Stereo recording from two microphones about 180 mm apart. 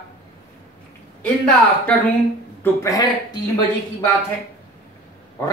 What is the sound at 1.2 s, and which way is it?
Speech, 5° left (ahead or behind).